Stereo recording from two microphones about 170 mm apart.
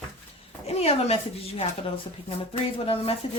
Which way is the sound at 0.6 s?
35° left (ahead or behind).